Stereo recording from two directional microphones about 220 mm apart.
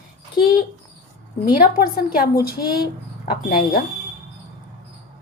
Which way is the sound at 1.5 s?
40° left (ahead or behind).